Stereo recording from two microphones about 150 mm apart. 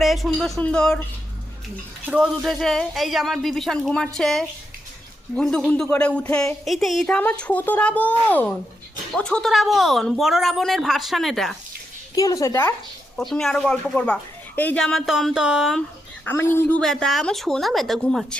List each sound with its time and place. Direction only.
0.0 s speech: centre (ahead or behind)
2.0 s speech: 5° right (ahead or behind)
12.1 s a woman's voice: 20° left (ahead or behind)
13.1 s speech: 5° left (ahead or behind)
16.2 s speech: 15° left (ahead or behind)